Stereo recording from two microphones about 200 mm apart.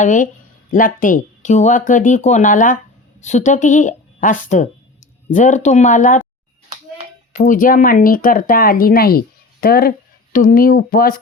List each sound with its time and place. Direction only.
0.0 s speech: 40° left (ahead or behind)
7.3 s speech: 40° left (ahead or behind)